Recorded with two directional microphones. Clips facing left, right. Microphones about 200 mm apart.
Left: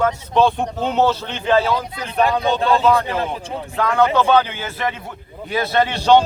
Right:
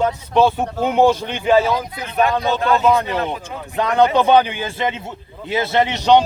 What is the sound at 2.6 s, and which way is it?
Speech, 30° left (ahead or behind).